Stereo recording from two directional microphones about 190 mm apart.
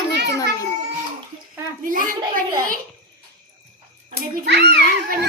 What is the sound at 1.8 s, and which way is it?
Speech, 45° right (ahead or behind).